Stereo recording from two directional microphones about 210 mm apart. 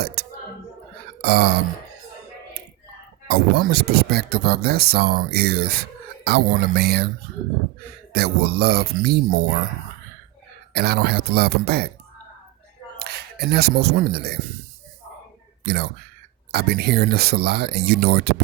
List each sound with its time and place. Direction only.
1.2 s speech: 50° right (ahead or behind)
3.2 s speech: 50° right (ahead or behind)
8.1 s speech: 50° right (ahead or behind)
10.8 s speech: 50° right (ahead or behind)
13.0 s speech: 50° right (ahead or behind)
15.6 s speech: 50° right (ahead or behind)